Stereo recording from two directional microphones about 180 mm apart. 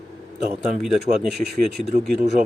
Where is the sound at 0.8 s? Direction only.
Centre (ahead or behind).